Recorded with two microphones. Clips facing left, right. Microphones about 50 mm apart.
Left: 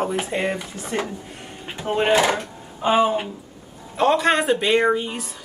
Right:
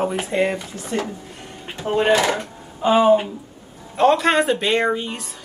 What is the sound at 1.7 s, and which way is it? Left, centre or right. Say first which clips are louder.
Speech: right 1 dB; left.